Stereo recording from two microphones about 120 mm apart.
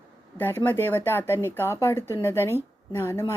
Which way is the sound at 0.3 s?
15° left (ahead or behind).